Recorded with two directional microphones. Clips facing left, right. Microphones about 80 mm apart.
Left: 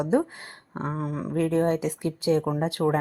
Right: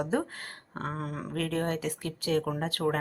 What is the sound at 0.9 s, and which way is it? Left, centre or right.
Speech, centre.